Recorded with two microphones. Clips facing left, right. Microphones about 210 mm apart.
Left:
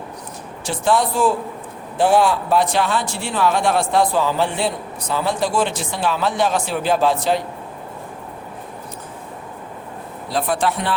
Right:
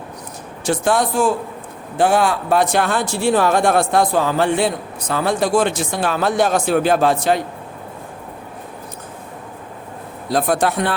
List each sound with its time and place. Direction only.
0.6 s speech: 45° right (ahead or behind)
10.3 s speech: 45° right (ahead or behind)